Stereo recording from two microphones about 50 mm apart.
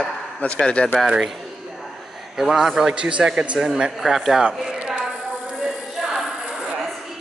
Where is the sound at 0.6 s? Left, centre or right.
Left.